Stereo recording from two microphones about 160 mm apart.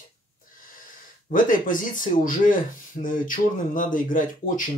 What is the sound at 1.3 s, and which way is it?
Speech, 55° left (ahead or behind).